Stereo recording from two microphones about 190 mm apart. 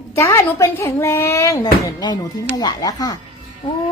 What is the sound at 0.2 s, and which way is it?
A woman's voice, 15° left (ahead or behind).